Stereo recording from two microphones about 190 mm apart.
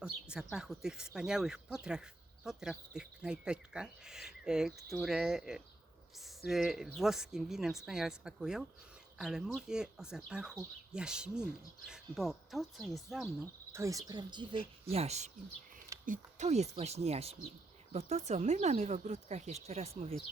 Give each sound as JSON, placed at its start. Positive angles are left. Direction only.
{"t": 0.0, "sound": "speech", "side_deg": -5}
{"t": 13.7, "sound": "speech", "side_deg": -15}
{"t": 14.8, "sound": "speech", "side_deg": -35}